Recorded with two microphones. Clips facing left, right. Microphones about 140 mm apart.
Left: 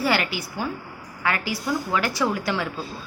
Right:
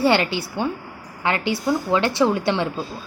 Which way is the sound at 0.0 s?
25° right (ahead or behind).